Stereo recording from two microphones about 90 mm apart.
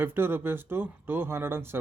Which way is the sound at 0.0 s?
25° right (ahead or behind).